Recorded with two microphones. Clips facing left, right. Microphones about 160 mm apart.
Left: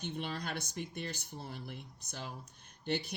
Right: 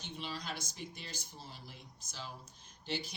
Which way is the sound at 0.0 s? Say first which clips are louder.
Left 4 dB; 55° left (ahead or behind).